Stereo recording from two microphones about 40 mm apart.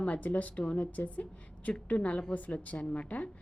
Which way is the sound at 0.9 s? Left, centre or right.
Left.